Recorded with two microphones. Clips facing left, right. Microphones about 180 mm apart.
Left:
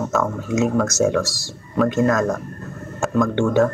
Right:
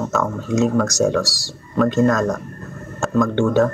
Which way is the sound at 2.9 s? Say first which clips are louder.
Right 1 dB; 10° left (ahead or behind).